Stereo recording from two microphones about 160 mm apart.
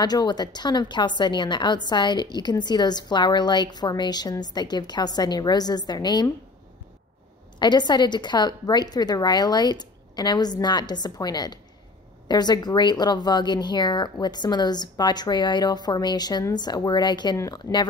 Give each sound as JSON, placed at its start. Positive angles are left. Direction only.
{"t": 0.0, "sound": "a woman's voice", "side_deg": 25}
{"t": 7.5, "sound": "a woman's voice", "side_deg": 25}